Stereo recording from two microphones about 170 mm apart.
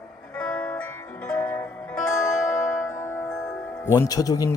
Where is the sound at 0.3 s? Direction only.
5° left (ahead or behind).